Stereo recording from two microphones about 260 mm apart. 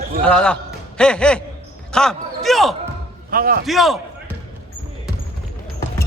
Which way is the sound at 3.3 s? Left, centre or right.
Right.